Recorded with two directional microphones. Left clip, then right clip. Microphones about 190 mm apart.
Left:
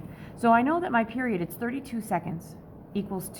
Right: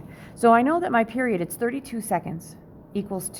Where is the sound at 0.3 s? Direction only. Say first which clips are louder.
Right 4 dB; 45° right (ahead or behind).